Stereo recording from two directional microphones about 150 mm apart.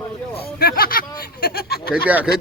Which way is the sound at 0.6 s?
85° left.